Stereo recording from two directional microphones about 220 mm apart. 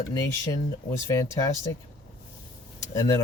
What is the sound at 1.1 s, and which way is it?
Speech, 15° left (ahead or behind).